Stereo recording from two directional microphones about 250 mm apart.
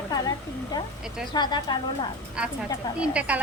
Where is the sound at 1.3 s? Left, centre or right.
Centre.